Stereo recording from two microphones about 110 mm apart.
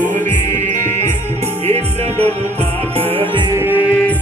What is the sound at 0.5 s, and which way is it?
Music, 90° right.